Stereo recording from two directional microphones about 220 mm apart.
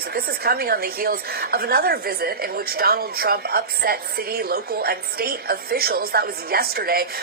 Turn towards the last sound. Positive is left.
turn(degrees=-45)  # may be behind; listen again after turning